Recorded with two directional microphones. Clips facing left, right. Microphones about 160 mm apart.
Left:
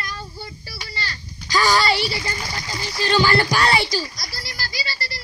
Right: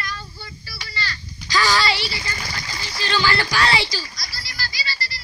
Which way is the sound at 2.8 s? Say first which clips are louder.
Left 4 dB; 50° left (ahead or behind).